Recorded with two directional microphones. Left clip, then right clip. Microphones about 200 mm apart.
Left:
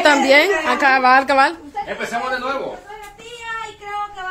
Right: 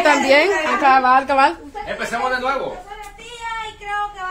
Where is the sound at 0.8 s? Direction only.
20° left (ahead or behind).